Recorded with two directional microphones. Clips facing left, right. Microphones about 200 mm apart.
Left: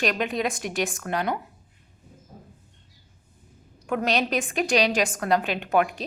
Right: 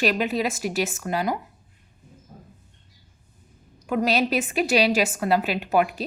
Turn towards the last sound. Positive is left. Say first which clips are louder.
# right 1 dB
turn(degrees=-5)  # may be behind; listen again after turning